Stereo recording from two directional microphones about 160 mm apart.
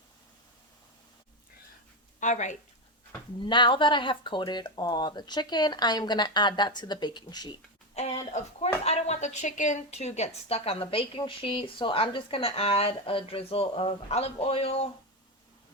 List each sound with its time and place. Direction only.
2.2 s speech: 50° left (ahead or behind)
3.4 s speech: 30° left (ahead or behind)
8.3 s speech: 40° left (ahead or behind)